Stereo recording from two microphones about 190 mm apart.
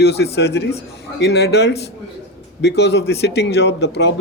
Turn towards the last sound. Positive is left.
turn(degrees=65)  # may be behind; listen again after turning